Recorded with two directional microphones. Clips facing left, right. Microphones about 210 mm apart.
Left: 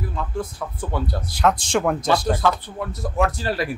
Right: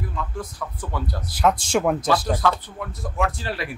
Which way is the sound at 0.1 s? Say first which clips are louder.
Left 3 dB; 30° left (ahead or behind).